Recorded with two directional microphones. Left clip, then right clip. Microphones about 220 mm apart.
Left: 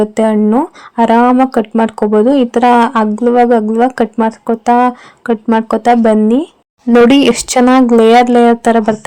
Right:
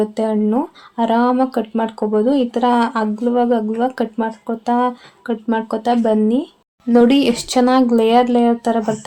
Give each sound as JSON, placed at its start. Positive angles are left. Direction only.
{"t": 0.0, "sound": "speech", "side_deg": 30}